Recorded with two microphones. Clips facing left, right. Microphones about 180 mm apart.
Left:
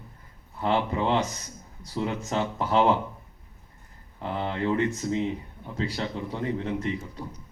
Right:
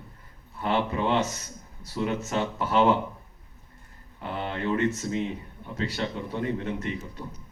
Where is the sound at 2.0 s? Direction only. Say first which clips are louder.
Even; 25° left (ahead or behind).